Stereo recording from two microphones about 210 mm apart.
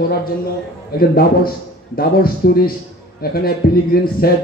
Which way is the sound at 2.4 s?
50° left (ahead or behind).